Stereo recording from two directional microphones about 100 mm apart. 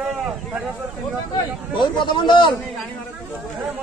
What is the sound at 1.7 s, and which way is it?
Speech, 50° left (ahead or behind).